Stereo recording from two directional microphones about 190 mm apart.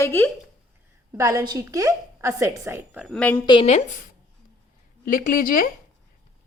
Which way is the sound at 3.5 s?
30° left (ahead or behind).